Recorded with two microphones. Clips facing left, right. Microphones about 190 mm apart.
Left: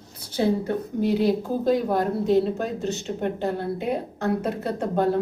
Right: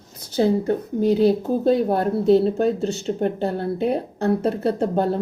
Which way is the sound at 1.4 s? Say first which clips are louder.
Right 4 dB; 30° right (ahead or behind).